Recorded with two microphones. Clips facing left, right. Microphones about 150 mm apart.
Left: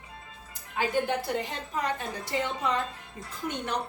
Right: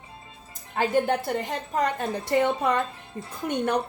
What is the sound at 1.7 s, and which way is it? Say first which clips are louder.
A woman's voice: right 6 dB; 55° right (ahead or behind).